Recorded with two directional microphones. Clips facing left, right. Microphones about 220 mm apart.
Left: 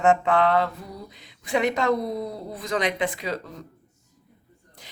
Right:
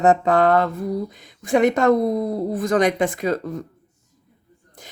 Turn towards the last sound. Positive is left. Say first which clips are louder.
# right 5 dB
turn(degrees=-50)  # may be behind; listen again after turning